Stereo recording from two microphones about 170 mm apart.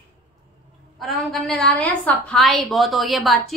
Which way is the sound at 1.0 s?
Centre (ahead or behind).